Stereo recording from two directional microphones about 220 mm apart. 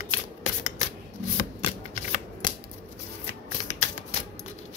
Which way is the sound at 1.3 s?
35° left (ahead or behind).